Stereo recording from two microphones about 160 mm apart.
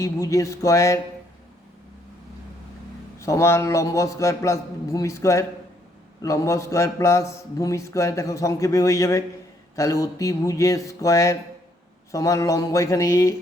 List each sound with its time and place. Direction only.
0.0 s a man's voice: 20° left (ahead or behind)
3.2 s a man's voice: 20° left (ahead or behind)